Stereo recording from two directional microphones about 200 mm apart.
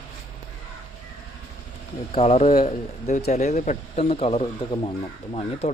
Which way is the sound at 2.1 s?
30° left (ahead or behind).